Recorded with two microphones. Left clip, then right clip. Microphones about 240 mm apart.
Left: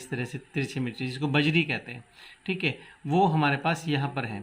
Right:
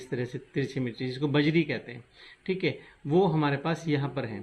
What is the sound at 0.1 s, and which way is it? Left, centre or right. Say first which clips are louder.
Speech: right 1 dB; left.